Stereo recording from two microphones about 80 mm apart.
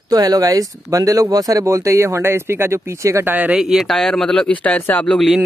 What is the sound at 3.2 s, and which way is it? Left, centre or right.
Speech, right.